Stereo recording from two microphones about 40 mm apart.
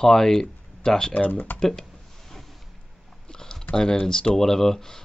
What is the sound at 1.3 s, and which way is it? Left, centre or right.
Speech, left.